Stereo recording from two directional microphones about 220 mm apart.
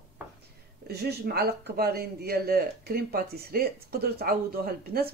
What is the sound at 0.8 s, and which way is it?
Speech, 45° right (ahead or behind).